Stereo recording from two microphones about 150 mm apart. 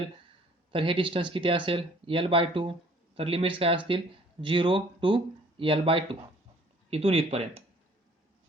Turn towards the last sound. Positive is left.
turn(degrees=-40)  # may be behind; listen again after turning